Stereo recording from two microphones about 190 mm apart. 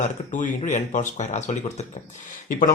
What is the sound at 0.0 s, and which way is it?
Speech, 40° left (ahead or behind).